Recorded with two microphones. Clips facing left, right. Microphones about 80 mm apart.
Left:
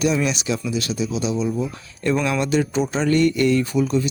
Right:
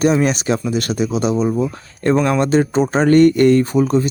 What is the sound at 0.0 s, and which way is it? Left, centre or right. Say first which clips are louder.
Speech: right 6 dB; right.